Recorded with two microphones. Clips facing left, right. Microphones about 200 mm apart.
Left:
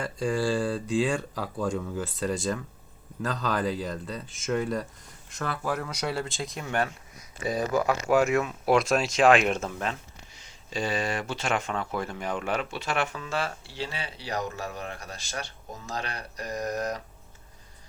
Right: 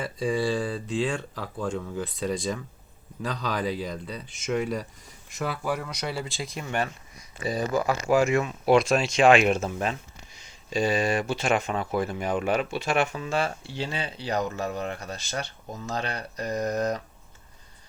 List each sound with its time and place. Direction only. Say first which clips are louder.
0.0 s speech: right 1 dB; 5° right (ahead or behind)
5.9 s speech: left 1 dB; 5° left (ahead or behind); by 17.0 s 25° right (ahead or behind)